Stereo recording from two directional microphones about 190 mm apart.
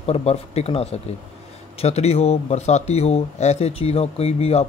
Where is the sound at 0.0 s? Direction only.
35° left (ahead or behind).